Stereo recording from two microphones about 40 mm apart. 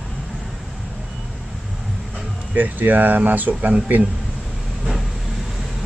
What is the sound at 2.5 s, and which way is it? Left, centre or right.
Speech, right.